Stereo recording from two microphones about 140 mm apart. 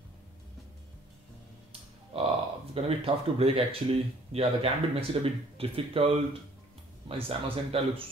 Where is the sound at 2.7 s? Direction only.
45° right (ahead or behind).